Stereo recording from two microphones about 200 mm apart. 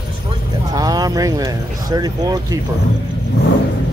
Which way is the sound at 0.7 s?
20° right (ahead or behind).